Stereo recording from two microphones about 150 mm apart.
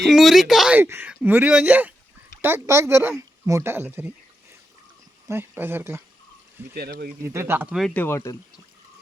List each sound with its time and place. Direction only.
0.0 s speech: centre (ahead or behind)
0.8 s speech: 15° right (ahead or behind)
5.3 s speech: 15° right (ahead or behind)
6.7 s speech: 90° right
7.2 s speech: 15° right (ahead or behind)
7.8 s speech: 5° left (ahead or behind)
8.0 s speech: 20° left (ahead or behind)